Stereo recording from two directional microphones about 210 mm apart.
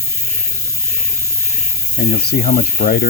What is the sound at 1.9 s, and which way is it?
Ratchet, 50° left (ahead or behind).